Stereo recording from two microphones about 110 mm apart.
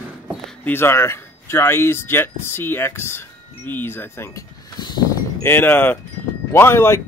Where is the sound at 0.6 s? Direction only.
20° left (ahead or behind).